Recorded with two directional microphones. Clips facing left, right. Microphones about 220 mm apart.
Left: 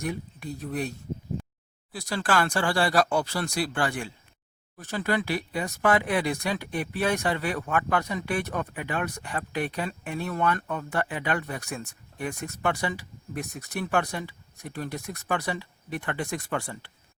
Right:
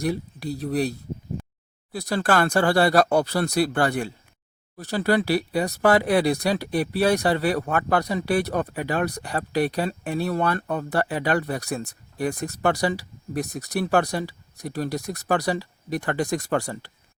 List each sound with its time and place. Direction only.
0.0 s speech: 35° right (ahead or behind)
2.0 s speech: 50° right (ahead or behind)
3.1 s speech: 60° right (ahead or behind)
3.4 s speech: 40° right (ahead or behind)